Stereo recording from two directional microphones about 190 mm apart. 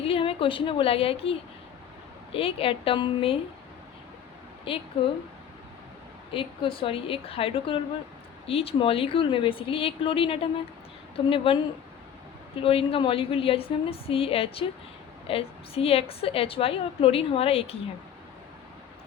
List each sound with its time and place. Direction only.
0.0 s a woman's voice: 30° left (ahead or behind)
4.7 s a woman's voice: 30° left (ahead or behind)
6.3 s a woman's voice: 30° left (ahead or behind)
12.6 s a woman's voice: 30° left (ahead or behind)